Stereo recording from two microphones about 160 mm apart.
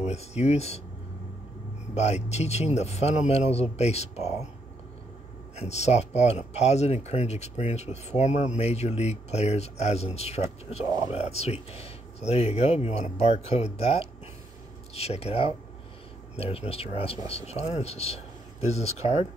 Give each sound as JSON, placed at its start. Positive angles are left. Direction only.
{"t": 0.0, "sound": "speech", "side_deg": 40}
{"t": 2.0, "sound": "speech", "side_deg": 45}
{"t": 5.6, "sound": "speech", "side_deg": 45}